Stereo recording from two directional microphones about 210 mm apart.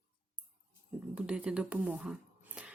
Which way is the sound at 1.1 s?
5° right (ahead or behind).